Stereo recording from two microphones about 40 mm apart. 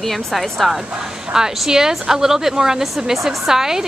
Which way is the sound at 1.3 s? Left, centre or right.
Centre.